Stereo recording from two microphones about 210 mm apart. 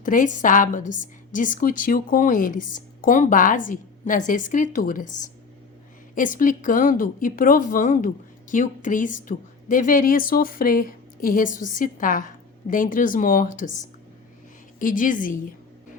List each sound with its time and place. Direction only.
0.0 s a woman's voice: 40° left (ahead or behind)
6.1 s a woman's voice: 40° left (ahead or behind)
14.8 s a woman's voice: 40° left (ahead or behind)